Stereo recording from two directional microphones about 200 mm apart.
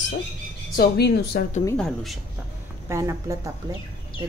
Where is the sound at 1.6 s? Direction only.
5° left (ahead or behind).